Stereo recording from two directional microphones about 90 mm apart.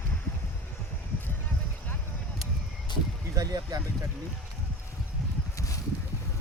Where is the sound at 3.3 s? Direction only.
45° right (ahead or behind).